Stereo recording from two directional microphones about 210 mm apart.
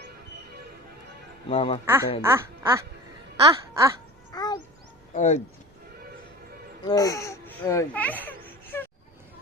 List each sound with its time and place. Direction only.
1.5 s a man's voice: 25° left (ahead or behind)
1.8 s speech: 10° right (ahead or behind)
4.3 s babbling: 20° left (ahead or behind)
5.1 s speech: 35° left (ahead or behind)
6.8 s speech: 15° left (ahead or behind)